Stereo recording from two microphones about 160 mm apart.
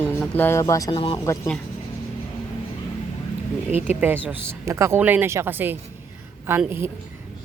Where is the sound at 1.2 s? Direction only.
20° left (ahead or behind).